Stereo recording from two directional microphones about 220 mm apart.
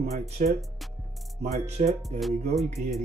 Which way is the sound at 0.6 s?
Centre (ahead or behind).